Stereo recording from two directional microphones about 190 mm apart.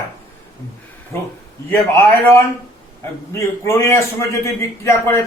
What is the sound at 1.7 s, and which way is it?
A man's voice, 15° left (ahead or behind).